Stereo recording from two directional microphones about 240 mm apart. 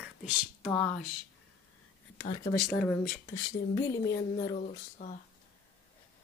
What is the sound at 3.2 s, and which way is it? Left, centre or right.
Speech, centre.